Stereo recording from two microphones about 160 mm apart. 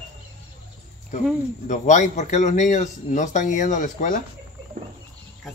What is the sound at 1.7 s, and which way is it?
A man's voice, 50° left (ahead or behind).